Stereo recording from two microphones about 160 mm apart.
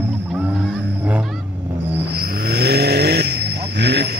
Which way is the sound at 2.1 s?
80° right.